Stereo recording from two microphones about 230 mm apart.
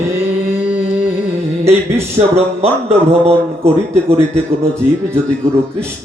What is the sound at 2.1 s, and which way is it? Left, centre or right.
Speech, right.